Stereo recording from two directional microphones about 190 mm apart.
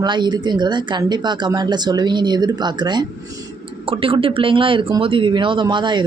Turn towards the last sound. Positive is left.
turn(degrees=-25)  # may be behind; listen again after turning